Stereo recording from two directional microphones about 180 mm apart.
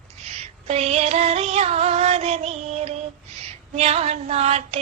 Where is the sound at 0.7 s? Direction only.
35° right (ahead or behind).